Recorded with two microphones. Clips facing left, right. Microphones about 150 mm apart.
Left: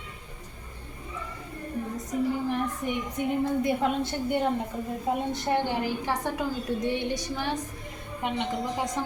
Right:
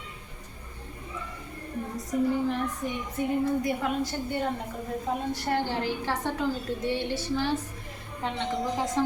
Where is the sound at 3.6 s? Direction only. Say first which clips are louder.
Left 2 dB; 20° left (ahead or behind).